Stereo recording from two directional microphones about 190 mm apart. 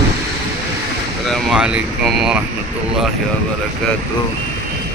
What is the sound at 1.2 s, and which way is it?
Speech, centre (ahead or behind).